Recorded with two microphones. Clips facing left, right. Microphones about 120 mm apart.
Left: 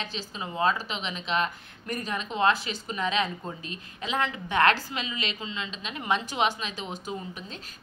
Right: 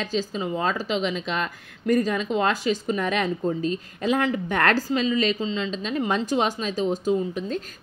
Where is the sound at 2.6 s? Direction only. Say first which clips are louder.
Right 12 dB; 40° right (ahead or behind).